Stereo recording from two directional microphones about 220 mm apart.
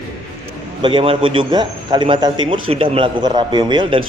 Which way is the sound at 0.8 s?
20° right (ahead or behind).